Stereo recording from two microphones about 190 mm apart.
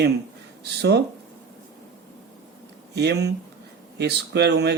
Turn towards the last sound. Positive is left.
turn(degrees=-60)  # may be behind; listen again after turning